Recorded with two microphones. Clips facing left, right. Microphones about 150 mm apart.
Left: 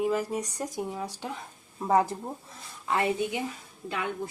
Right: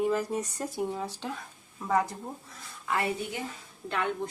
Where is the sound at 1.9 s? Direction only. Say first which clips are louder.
Left 3 dB; 30° left (ahead or behind).